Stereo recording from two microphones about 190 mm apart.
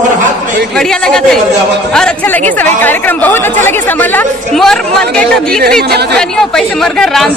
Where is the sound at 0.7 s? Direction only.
5° left (ahead or behind).